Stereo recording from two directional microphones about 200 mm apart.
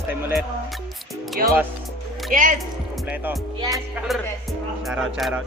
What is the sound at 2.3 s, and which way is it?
Speech, 40° right (ahead or behind).